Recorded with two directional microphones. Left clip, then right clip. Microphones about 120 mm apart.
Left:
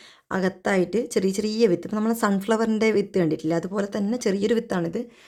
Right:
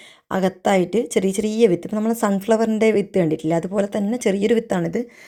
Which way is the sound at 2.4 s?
10° right (ahead or behind).